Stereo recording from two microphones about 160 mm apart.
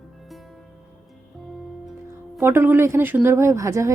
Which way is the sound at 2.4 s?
15° right (ahead or behind).